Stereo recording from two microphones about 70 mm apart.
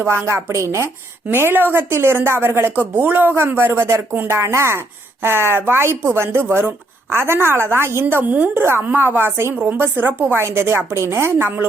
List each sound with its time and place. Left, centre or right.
0.0 s speech: right
1.3 s speech: right
8.0 s a woman's voice: right